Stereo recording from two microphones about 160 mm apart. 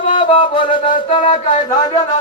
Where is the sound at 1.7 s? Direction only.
25° left (ahead or behind).